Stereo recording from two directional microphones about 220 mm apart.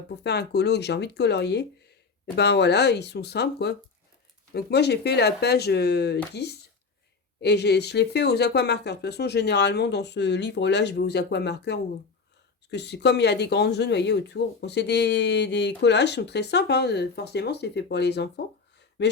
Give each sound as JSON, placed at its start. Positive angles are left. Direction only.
{"t": 0.2, "sound": "speech", "side_deg": 50}